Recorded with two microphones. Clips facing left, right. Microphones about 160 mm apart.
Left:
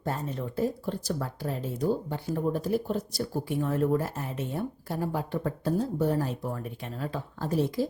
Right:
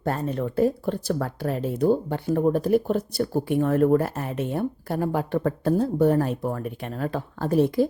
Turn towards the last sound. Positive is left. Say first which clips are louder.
# right 7 dB
turn(degrees=-60)  # may be behind; listen again after turning